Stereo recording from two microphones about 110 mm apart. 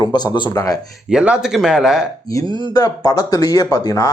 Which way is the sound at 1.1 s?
5° right (ahead or behind).